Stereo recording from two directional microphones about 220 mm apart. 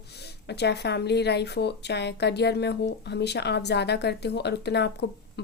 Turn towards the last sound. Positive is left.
turn(degrees=50)  # may be behind; listen again after turning